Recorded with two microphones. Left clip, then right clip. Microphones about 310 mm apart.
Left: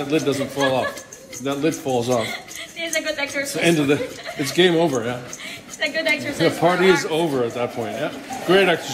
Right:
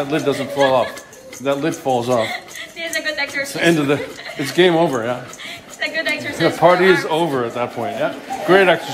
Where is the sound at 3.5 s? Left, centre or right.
Right.